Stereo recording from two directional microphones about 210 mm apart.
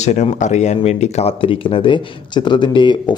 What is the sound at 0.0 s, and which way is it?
Speech, 35° left (ahead or behind).